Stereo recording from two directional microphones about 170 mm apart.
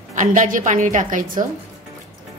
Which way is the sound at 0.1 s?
50° right (ahead or behind).